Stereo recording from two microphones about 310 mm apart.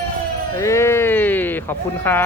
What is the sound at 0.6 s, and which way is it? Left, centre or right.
Speech, centre.